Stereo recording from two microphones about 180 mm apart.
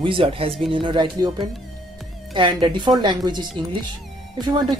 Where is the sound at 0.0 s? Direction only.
30° right (ahead or behind).